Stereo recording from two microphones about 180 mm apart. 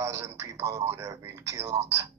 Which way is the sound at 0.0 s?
15° right (ahead or behind).